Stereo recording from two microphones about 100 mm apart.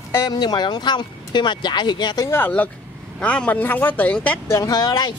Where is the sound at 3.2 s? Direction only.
15° left (ahead or behind).